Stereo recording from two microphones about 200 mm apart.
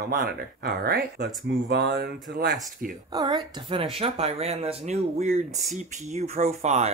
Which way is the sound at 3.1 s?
20° right (ahead or behind).